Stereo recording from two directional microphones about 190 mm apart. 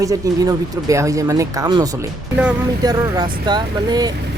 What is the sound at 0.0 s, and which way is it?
Speech, 20° right (ahead or behind).